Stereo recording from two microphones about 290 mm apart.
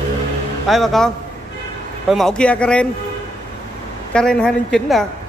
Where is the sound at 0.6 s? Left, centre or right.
Centre.